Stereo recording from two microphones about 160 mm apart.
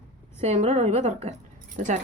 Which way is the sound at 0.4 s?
45° right (ahead or behind).